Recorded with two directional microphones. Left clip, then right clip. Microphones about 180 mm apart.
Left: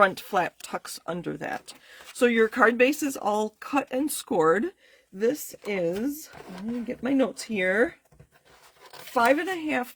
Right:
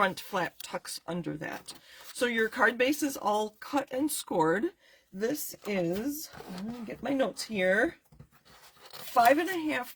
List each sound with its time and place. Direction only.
0.0 s speech: 50° left (ahead or behind)
9.2 s speech: 45° left (ahead or behind)